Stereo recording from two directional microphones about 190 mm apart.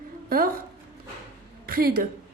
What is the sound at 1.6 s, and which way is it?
Speech, 50° right (ahead or behind).